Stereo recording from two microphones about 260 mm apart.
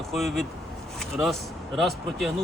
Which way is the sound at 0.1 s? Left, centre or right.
Centre.